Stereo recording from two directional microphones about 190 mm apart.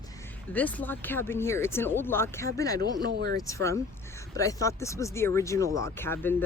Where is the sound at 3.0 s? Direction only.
60° right (ahead or behind).